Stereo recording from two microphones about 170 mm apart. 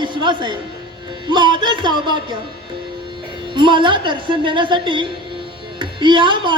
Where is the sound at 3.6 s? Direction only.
30° right (ahead or behind).